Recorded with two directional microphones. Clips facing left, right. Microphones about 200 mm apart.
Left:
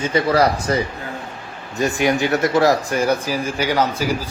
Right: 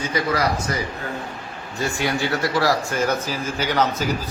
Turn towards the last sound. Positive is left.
turn(degrees=10)  # may be behind; listen again after turning